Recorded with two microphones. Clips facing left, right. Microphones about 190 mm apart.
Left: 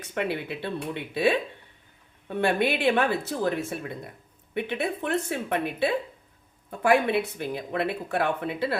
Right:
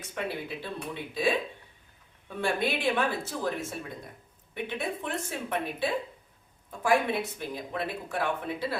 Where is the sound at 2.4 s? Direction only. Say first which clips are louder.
Left 5 dB; 65° left (ahead or behind).